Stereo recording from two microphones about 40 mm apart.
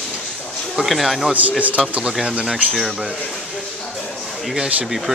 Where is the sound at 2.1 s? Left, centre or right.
Centre.